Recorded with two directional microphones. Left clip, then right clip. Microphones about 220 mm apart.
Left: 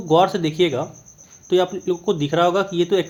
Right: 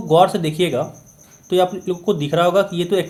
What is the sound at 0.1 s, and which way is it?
Speech, 25° left (ahead or behind).